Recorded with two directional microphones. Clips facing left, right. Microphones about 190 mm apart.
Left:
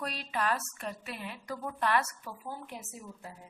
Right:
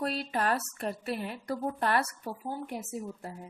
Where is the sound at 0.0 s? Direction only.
40° right (ahead or behind).